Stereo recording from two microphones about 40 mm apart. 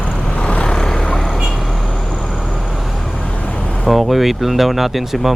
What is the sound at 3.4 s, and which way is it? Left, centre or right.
Vehicle, left.